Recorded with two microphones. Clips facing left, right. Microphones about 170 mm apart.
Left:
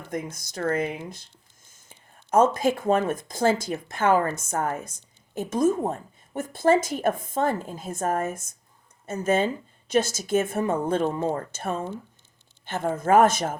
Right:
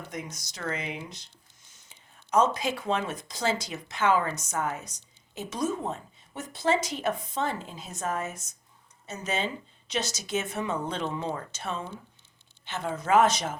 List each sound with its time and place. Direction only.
0.1 s speech: 55° left (ahead or behind)